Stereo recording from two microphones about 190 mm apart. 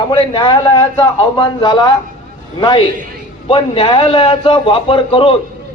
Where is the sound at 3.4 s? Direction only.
30° left (ahead or behind).